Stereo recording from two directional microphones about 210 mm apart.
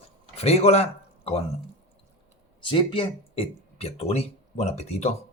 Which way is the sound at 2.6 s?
25° left (ahead or behind).